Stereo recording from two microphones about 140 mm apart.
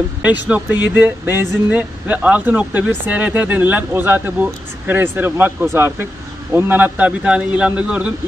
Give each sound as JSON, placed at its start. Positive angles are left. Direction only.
{"t": 0.2, "sound": "speech", "side_deg": -10}